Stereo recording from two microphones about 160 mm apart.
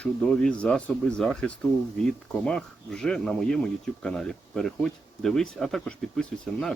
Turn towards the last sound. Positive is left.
turn(degrees=5)  # may be behind; listen again after turning